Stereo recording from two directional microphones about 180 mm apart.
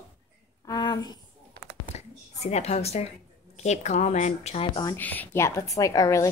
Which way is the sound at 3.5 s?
40° left (ahead or behind).